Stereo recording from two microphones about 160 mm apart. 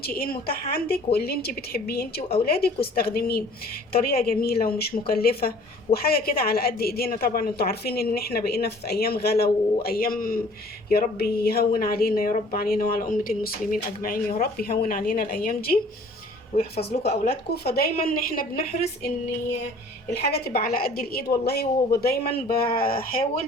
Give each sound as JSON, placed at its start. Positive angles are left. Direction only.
{"t": 0.0, "sound": "a woman's voice", "side_deg": 70}
{"t": 9.8, "sound": "speech", "side_deg": 65}
{"t": 16.6, "sound": "a woman's voice", "side_deg": 40}
{"t": 17.5, "sound": "a woman's voice", "side_deg": 80}
{"t": 20.3, "sound": "a woman's voice", "side_deg": 75}